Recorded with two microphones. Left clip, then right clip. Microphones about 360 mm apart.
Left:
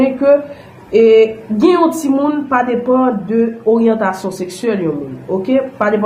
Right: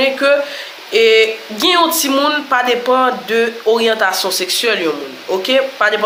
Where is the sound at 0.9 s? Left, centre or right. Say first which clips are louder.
Left 2 dB; centre.